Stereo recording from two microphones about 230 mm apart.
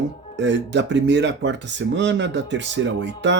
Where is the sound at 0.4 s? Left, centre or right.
Right.